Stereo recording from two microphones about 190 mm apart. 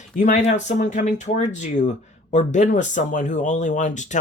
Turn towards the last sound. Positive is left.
turn(degrees=40)  # may be behind; listen again after turning